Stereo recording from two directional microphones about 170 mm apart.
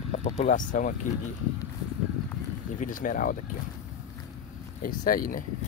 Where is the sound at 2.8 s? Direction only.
50° left (ahead or behind).